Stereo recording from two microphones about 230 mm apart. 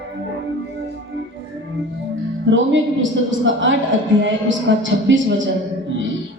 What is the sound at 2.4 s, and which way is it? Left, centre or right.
Music, right.